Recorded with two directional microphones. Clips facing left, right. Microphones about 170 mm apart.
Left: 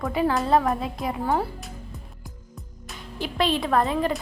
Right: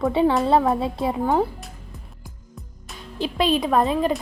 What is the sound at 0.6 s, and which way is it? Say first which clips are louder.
Speech: right 4 dB; 30° right (ahead or behind).